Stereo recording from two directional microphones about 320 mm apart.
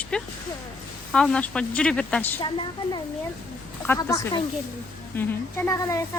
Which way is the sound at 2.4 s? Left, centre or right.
Centre.